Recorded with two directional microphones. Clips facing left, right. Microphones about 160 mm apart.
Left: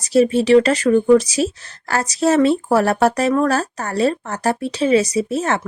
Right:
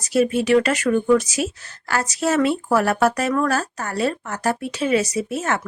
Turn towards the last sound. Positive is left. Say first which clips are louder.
# left 4 dB
turn(degrees=35)  # may be behind; listen again after turning